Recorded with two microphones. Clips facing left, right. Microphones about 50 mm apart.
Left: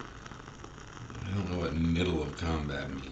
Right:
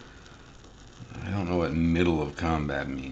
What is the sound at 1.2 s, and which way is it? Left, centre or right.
Speech, right.